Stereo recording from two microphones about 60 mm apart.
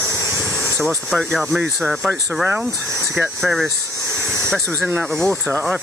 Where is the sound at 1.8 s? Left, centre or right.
Centre.